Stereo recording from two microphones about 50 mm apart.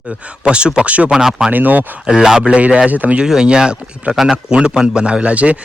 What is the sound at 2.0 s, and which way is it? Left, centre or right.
Speech, centre.